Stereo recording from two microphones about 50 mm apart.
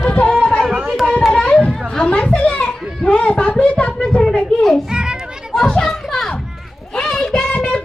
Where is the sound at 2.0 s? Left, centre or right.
Left.